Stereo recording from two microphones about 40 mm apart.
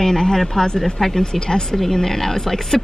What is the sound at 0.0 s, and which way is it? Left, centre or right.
Speech, centre.